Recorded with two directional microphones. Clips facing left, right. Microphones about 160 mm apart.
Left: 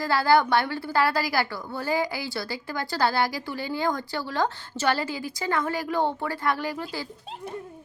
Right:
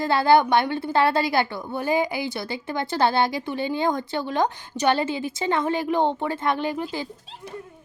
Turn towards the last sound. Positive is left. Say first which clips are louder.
# right 4 dB
turn(degrees=-20)  # may be behind; listen again after turning